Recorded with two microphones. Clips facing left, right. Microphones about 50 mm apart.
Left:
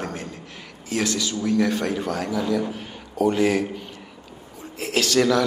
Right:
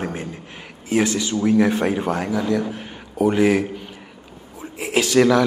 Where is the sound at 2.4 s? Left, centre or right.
Centre.